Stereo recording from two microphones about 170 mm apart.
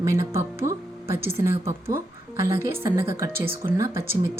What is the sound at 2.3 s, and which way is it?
Speech, 15° right (ahead or behind).